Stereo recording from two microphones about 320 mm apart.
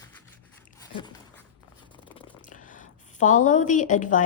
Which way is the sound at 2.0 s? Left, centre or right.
Centre.